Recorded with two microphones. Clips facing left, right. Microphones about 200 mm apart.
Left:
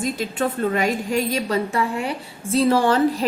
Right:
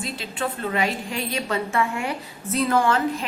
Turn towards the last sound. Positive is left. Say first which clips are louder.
# left 4 dB
turn(degrees=35)  # may be behind; listen again after turning